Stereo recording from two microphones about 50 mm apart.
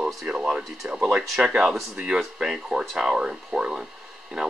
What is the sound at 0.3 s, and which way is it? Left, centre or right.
Speech, right.